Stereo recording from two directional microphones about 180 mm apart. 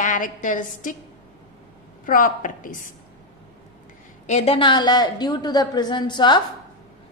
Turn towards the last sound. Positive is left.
turn(degrees=25)  # may be behind; listen again after turning